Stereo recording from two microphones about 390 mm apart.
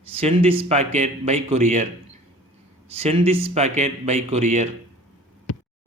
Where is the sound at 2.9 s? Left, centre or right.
Centre.